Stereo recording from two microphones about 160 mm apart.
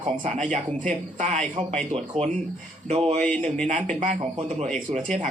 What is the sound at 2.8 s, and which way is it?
Speech, 45° right (ahead or behind).